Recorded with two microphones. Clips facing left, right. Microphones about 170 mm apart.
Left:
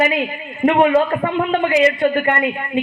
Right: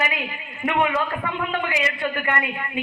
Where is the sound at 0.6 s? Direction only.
40° left (ahead or behind).